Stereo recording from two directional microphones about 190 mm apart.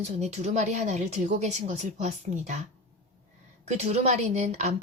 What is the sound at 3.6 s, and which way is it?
A woman's voice, 35° right (ahead or behind).